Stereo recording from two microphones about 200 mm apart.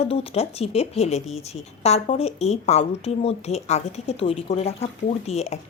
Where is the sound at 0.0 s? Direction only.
30° left (ahead or behind).